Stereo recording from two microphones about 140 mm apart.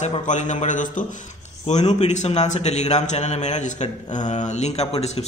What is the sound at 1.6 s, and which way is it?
A man's voice, 55° left (ahead or behind).